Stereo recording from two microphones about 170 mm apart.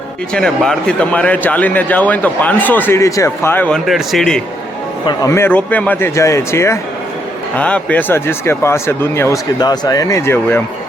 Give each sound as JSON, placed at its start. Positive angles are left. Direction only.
{"t": 0.3, "sound": "a man's voice", "side_deg": 5}
{"t": 3.8, "sound": "a man's voice", "side_deg": 0}
{"t": 5.0, "sound": "a man's voice", "side_deg": 20}